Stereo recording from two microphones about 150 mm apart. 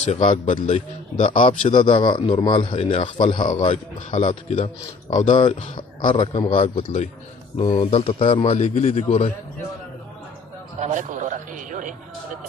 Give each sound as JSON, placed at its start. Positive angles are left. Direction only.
{"t": 0.0, "sound": "a man's voice", "side_deg": 50}
{"t": 0.7, "sound": "a man's voice", "side_deg": 55}
{"t": 1.8, "sound": "a man's voice", "side_deg": 35}
{"t": 3.6, "sound": "a man's voice", "side_deg": 50}
{"t": 5.8, "sound": "a man's voice", "side_deg": 30}
{"t": 6.8, "sound": "a man's voice", "side_deg": 50}
{"t": 7.5, "sound": "a man's voice", "side_deg": 40}
{"t": 8.5, "sound": "a man's voice", "side_deg": 50}
{"t": 10.8, "sound": "a sound", "side_deg": -55}